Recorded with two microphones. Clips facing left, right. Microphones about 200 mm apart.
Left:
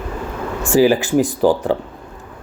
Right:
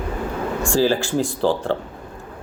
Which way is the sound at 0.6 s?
15° left (ahead or behind).